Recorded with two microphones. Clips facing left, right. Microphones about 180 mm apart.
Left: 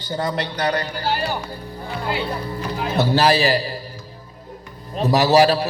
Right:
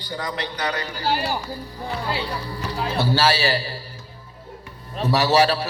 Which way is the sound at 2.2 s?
50° left (ahead or behind).